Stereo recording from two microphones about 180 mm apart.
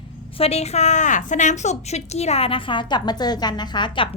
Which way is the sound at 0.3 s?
35° left (ahead or behind).